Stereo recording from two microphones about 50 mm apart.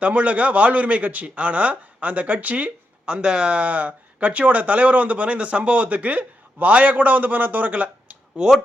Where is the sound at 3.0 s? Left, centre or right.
Centre.